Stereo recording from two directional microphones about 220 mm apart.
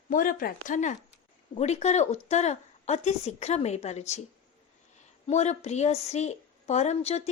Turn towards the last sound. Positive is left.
turn(degrees=30)  # may be behind; listen again after turning